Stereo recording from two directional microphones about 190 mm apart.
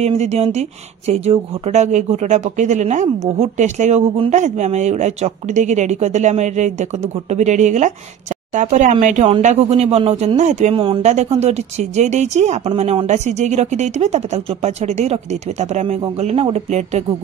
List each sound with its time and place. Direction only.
0.0 s speech: 35° right (ahead or behind)